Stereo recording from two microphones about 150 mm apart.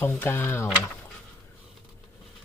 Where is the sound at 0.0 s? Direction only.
15° left (ahead or behind).